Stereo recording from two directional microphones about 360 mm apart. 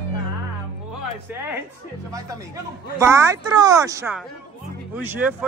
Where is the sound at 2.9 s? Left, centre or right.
Centre.